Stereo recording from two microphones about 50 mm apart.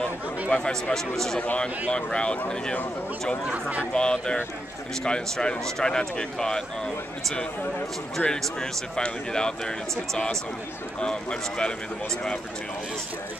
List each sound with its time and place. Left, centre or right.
0.5 s speech: left
0.9 s speech: centre
1.9 s speech: left
3.5 s speech: right
3.9 s speech: centre
8.3 s speech: centre